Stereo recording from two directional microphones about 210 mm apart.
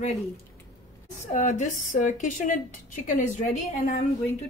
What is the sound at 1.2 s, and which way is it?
A woman's voice, 35° left (ahead or behind).